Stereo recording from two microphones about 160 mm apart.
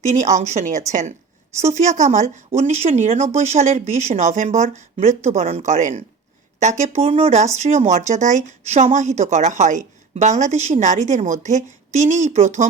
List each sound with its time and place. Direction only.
0.1 s speech: 50° right (ahead or behind)